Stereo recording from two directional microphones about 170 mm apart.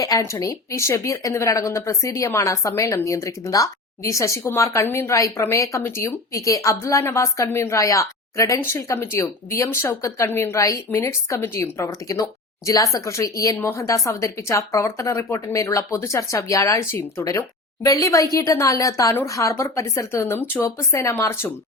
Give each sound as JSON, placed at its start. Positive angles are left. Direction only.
{"t": 0.0, "sound": "speech", "side_deg": 20}